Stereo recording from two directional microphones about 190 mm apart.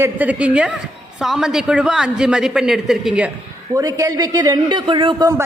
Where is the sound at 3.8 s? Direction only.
15° right (ahead or behind).